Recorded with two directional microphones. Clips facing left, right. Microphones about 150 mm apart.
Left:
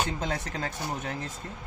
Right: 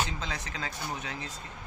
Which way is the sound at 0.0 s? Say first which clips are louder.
Left 4 dB; 50° left (ahead or behind).